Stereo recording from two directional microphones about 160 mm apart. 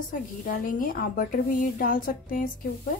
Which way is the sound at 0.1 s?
60° left (ahead or behind).